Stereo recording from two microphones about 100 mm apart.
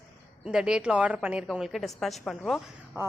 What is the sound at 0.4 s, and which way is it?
A woman's voice, 5° right (ahead or behind).